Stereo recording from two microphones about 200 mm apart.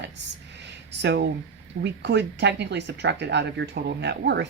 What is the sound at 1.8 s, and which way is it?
Speech, 60° right (ahead or behind).